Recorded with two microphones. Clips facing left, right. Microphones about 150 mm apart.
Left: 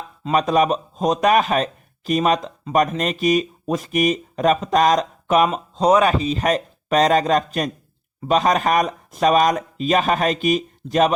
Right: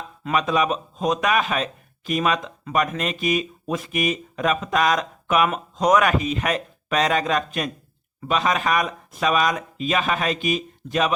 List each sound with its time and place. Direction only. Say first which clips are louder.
0.3 s speech: left 4 dB; 40° left (ahead or behind)